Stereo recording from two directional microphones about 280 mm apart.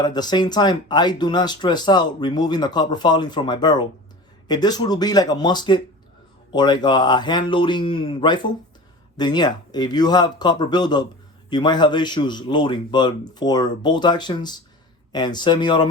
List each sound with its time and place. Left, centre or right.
0.0 s speech: centre